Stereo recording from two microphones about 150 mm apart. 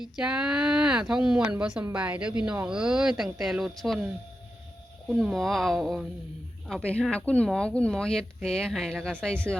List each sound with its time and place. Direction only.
0.2 s speech: 5° right (ahead or behind)